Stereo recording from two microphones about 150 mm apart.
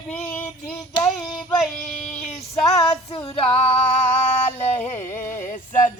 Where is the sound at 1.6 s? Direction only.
Centre (ahead or behind).